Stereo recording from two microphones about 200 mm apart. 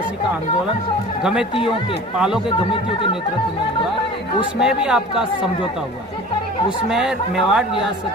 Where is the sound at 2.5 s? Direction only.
25° left (ahead or behind).